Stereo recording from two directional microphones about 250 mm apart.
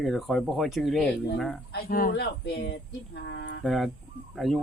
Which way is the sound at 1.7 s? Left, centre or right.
Left.